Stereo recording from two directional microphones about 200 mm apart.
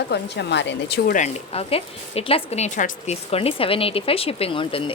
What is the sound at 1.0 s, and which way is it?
A woman's voice, 40° left (ahead or behind).